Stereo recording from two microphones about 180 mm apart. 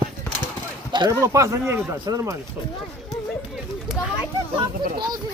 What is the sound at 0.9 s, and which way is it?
Speech, 25° right (ahead or behind).